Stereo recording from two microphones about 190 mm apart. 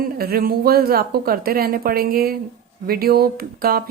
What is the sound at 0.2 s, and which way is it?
A woman's voice, 50° right (ahead or behind).